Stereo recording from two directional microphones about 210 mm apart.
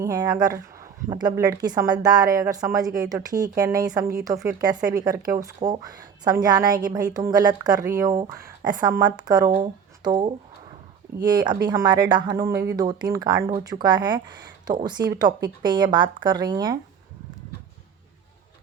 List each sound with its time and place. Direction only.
0.0 s speech: 20° right (ahead or behind)
4.6 s speech: 20° right (ahead or behind)